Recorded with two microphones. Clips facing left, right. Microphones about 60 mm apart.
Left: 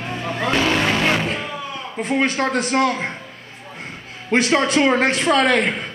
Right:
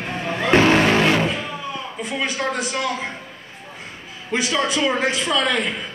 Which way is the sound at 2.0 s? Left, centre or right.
Left.